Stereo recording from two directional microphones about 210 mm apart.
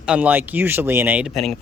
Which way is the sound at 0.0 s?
5° right (ahead or behind).